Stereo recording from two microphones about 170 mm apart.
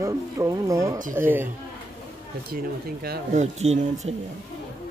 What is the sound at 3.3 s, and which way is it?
Speech, 40° right (ahead or behind).